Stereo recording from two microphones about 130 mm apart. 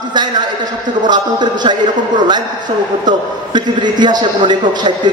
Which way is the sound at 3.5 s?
35° right (ahead or behind).